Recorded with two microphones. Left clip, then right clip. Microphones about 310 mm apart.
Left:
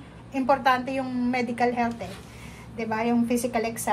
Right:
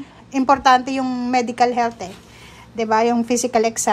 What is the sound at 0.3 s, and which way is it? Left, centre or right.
A woman's voice, centre.